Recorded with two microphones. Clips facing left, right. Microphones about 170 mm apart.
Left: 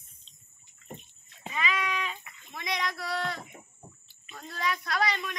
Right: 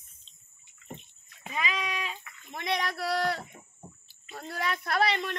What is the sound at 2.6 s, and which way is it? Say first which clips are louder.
Speech: right 3 dB; 60° right (ahead or behind).